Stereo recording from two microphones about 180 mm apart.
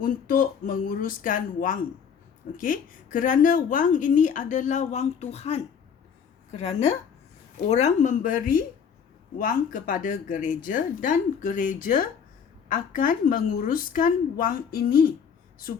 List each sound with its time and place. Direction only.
0.0 s a woman's voice: 50° left (ahead or behind)